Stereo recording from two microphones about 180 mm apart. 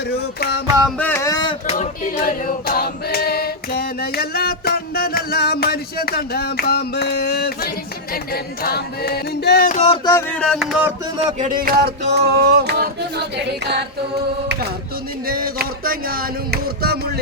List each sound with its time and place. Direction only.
0.1 s female singing: 65° left (ahead or behind)
0.9 s music: 10° left (ahead or behind)
1.6 s female singing: 45° left (ahead or behind)
9.8 s a sound: 25° left (ahead or behind)
10.2 s music: 5° left (ahead or behind)
11.3 s music: 50° right (ahead or behind); by 14.7 s 65° right (ahead or behind)
15.3 s music: 55° right (ahead or behind)